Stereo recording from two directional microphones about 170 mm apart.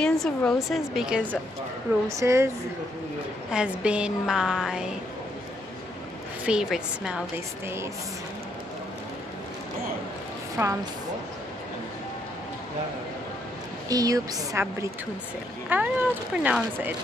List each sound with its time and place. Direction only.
0.0 s a woman's voice: 5° left (ahead or behind)
2.0 s speech: 20° right (ahead or behind)
3.4 s a woman's voice: 5° right (ahead or behind)
6.4 s a woman's voice: 5° right (ahead or behind)
7.6 s speech: 15° right (ahead or behind)
10.6 s speech: 15° right (ahead or behind)
13.8 s speech: 20° right (ahead or behind)